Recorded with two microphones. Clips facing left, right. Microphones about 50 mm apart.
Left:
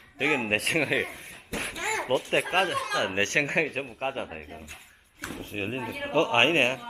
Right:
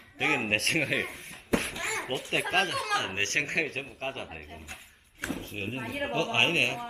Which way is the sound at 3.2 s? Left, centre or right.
Left.